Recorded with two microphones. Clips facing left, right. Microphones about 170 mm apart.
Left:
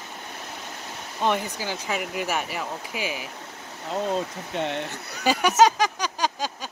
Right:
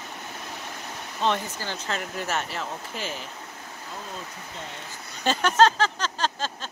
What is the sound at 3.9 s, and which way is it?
Speech, 80° left.